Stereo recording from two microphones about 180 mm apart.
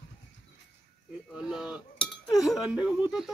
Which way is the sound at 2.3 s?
Centre (ahead or behind).